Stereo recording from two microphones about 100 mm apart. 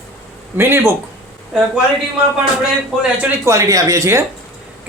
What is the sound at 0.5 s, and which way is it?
Speech, 25° right (ahead or behind).